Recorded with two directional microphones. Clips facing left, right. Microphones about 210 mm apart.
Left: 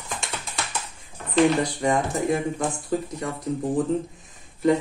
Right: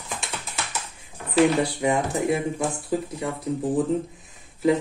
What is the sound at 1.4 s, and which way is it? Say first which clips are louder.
Speech: even; 5° right (ahead or behind).